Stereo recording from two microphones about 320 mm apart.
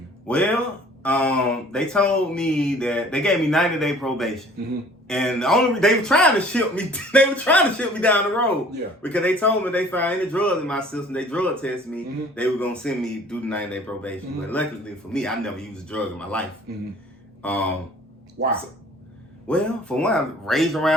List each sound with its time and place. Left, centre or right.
0.3 s a man's voice: centre
17.4 s a man's voice: centre
18.4 s speech: right
19.5 s a man's voice: centre